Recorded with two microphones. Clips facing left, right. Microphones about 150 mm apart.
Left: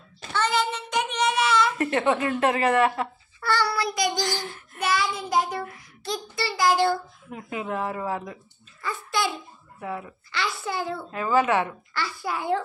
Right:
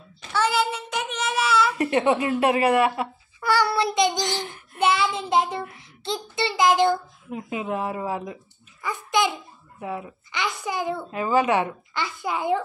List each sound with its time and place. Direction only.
0.3 s child singing: 5° right (ahead or behind)
1.8 s speech: 20° right (ahead or behind)
3.7 s child singing: 25° right (ahead or behind)
8.8 s a child's voice: 20° right (ahead or behind)